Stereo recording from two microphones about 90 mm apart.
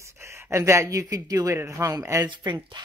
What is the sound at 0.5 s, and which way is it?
Speech, 30° right (ahead or behind).